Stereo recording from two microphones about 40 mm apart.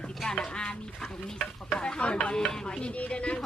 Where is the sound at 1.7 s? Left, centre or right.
Left.